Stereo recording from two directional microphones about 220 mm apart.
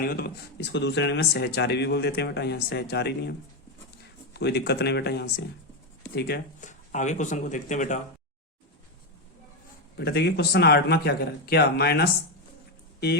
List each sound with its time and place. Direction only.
0.0 s speech: 45° left (ahead or behind)
4.4 s speech: 50° left (ahead or behind)
10.0 s speech: 45° left (ahead or behind)